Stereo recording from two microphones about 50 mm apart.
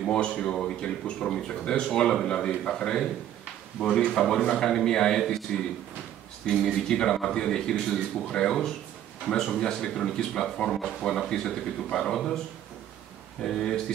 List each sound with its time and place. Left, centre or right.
0.1 s speech: centre
4.2 s speech: centre
6.7 s speech: centre
13.4 s speech: centre